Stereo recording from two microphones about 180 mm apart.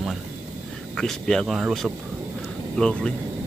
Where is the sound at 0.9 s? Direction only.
5° left (ahead or behind).